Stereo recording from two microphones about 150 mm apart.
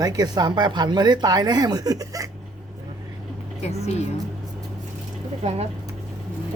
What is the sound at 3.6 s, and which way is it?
Speech, 45° left (ahead or behind).